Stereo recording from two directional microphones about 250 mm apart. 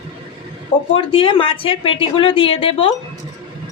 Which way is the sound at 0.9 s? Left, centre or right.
Left.